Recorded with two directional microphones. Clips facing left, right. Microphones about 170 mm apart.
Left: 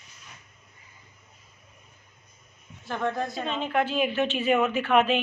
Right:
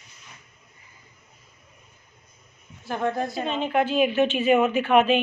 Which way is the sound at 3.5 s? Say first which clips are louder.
Right 4 dB; 20° right (ahead or behind).